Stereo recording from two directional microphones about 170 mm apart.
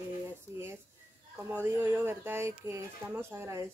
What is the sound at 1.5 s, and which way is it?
Speech, 10° right (ahead or behind).